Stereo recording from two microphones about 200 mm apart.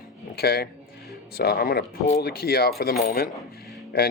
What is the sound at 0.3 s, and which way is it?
Speech, 50° left (ahead or behind).